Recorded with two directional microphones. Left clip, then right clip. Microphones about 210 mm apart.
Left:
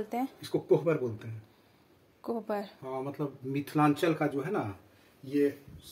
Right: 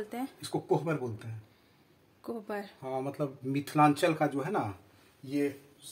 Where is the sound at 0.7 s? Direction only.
30° right (ahead or behind).